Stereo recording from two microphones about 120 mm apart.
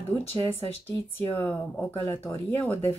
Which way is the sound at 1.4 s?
15° left (ahead or behind).